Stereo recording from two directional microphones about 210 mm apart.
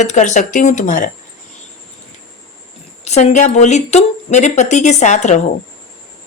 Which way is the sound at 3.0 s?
30° left (ahead or behind).